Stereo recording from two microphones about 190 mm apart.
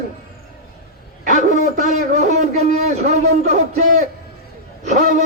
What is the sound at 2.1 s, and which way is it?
A man's voice, 40° right (ahead or behind).